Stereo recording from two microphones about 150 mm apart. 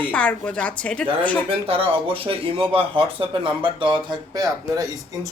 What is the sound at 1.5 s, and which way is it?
Speech, 40° right (ahead or behind).